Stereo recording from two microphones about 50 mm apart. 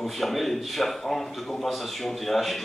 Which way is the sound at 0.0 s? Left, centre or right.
Centre.